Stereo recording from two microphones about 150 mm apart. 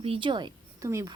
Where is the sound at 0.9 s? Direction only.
20° right (ahead or behind).